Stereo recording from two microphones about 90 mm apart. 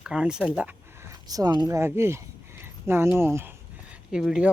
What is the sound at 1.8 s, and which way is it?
Speech, 30° right (ahead or behind).